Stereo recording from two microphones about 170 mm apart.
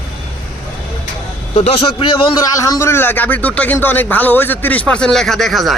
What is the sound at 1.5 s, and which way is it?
Speech, 35° left (ahead or behind).